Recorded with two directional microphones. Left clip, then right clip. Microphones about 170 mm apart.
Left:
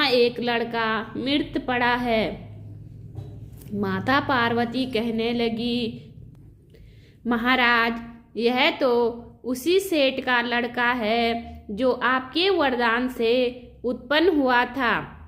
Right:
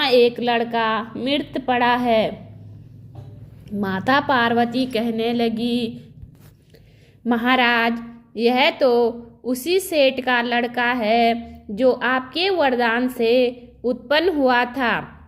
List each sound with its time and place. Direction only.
0.0 s a woman's voice: 35° right (ahead or behind)
3.7 s a woman's voice: 35° right (ahead or behind)
7.3 s a woman's voice: 30° right (ahead or behind)